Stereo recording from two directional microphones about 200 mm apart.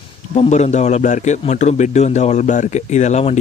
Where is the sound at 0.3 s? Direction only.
35° left (ahead or behind).